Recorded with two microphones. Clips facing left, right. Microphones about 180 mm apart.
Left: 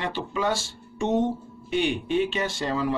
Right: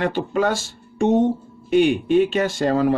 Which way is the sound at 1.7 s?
50° right (ahead or behind).